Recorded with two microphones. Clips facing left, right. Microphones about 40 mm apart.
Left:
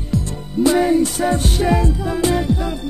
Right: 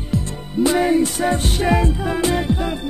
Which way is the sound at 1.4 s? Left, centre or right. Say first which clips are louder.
Left 1 dB; right.